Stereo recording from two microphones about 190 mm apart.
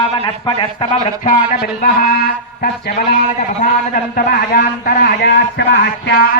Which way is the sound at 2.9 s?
40° left (ahead or behind).